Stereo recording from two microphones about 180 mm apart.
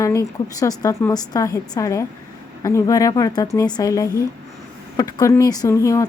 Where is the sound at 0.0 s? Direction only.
15° left (ahead or behind).